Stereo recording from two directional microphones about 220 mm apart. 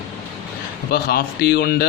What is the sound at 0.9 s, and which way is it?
Speech, 45° left (ahead or behind).